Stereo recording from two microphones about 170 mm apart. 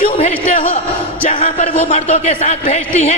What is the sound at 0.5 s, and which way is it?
Speech, 50° left (ahead or behind).